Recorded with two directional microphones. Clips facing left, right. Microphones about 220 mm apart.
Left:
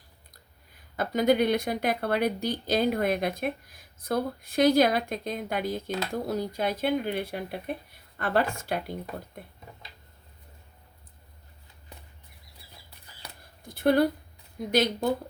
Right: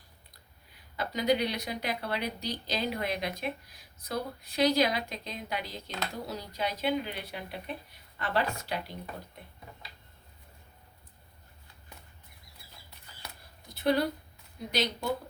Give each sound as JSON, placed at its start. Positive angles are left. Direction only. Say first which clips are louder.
{"t": 0.9, "sound": "speech", "louder": "left 5 dB", "side_deg": 50}
{"t": 13.7, "sound": "speech", "louder": "left 5 dB", "side_deg": 50}